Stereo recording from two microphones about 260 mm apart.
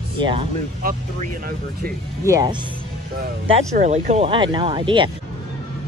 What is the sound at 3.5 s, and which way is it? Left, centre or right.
Speech, right.